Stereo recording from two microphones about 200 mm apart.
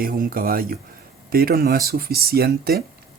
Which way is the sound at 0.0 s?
45° right (ahead or behind).